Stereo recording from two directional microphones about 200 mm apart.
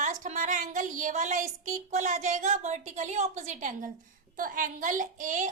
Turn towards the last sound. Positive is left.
turn(degrees=-40)  # may be behind; listen again after turning